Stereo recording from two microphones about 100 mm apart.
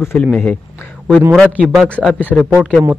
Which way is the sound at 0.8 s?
20° left (ahead or behind).